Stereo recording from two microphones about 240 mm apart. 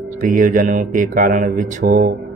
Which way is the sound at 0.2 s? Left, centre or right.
Right.